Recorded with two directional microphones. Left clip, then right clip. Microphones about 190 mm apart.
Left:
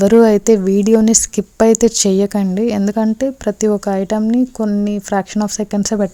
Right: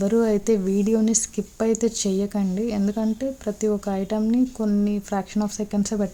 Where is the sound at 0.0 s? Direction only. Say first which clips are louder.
Left 11 dB; 45° left (ahead or behind).